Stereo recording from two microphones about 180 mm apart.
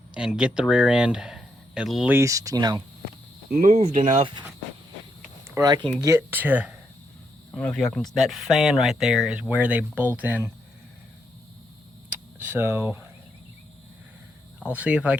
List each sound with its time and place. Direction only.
0.1 s speech: 5° right (ahead or behind)
2.1 s speech: 15° right (ahead or behind)
3.5 s speech: 50° right (ahead or behind)
4.2 s speech: 30° right (ahead or behind)
5.5 s speech: 20° right (ahead or behind)
7.5 s speech: 5° left (ahead or behind)
12.4 s speech: 10° right (ahead or behind)
14.6 s speech: 5° right (ahead or behind)